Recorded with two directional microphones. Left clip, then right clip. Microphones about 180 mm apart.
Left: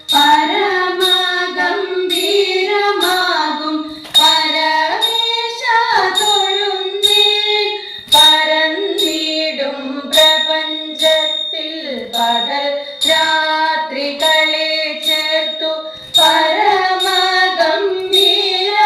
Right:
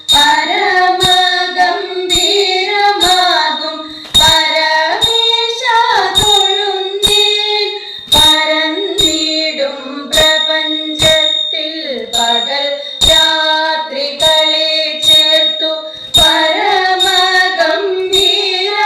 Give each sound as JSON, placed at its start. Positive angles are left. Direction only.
{"t": 0.1, "sound": "child singing", "side_deg": -30}
{"t": 4.1, "sound": "female singing", "side_deg": -35}
{"t": 8.1, "sound": "music", "side_deg": -35}